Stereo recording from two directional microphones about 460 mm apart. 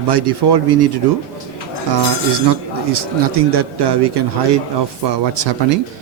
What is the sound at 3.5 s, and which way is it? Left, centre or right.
Speech, right.